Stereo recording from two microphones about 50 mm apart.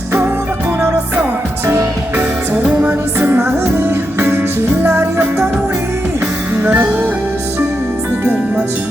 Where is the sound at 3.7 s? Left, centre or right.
Right.